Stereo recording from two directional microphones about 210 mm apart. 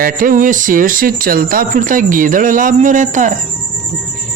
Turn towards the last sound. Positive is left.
turn(degrees=-35)  # may be behind; listen again after turning